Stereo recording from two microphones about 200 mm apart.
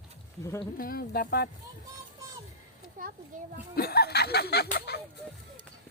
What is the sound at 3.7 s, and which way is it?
Speech, 50° left (ahead or behind).